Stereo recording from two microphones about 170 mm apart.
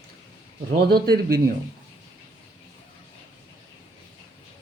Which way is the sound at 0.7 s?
65° right (ahead or behind).